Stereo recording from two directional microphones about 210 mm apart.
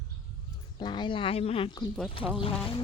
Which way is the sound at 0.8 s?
20° left (ahead or behind).